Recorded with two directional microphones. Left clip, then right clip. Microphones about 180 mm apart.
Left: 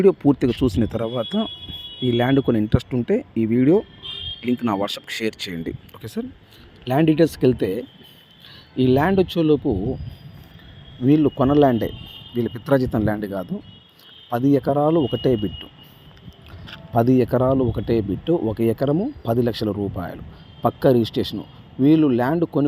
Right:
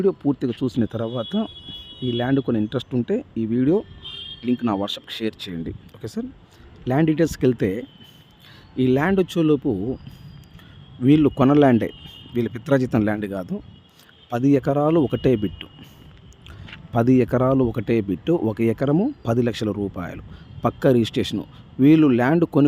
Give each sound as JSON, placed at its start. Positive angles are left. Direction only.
{"t": 0.0, "sound": "speech", "side_deg": 10}
{"t": 0.8, "sound": "speech", "side_deg": 0}
{"t": 11.0, "sound": "speech", "side_deg": -20}
{"t": 16.9, "sound": "speech", "side_deg": -15}